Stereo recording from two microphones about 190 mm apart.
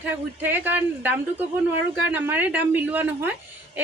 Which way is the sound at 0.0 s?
10° right (ahead or behind).